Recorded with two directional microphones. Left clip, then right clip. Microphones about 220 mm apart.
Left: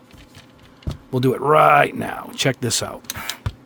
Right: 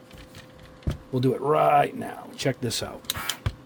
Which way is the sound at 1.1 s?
35° left (ahead or behind).